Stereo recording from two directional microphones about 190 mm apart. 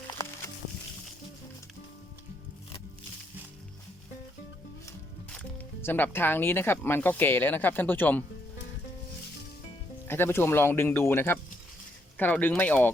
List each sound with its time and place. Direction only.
0.2 s music: 20° left (ahead or behind)
5.8 s speech: 10° left (ahead or behind)
10.1 s speech: 10° left (ahead or behind)